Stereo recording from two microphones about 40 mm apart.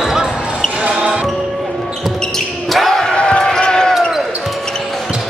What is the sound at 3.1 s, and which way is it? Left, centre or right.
Basketball bounce, left.